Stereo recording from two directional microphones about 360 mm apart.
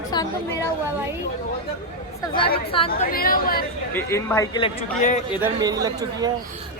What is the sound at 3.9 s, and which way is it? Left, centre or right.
Speech, centre.